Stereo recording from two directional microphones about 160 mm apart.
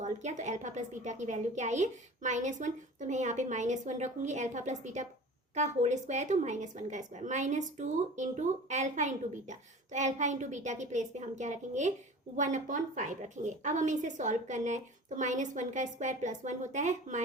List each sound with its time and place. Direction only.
0.0 s a woman's voice: 50° right (ahead or behind)